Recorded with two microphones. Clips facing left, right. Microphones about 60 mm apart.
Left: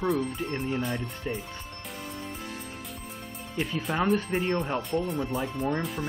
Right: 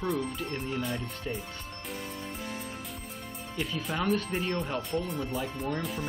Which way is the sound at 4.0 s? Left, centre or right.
Left.